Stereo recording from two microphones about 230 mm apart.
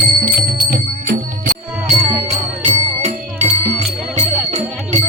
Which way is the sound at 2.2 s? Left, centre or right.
Right.